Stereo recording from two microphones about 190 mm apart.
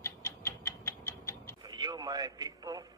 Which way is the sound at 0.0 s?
10° left (ahead or behind).